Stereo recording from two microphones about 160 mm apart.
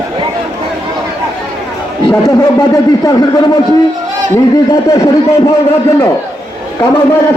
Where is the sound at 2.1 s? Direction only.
25° left (ahead or behind).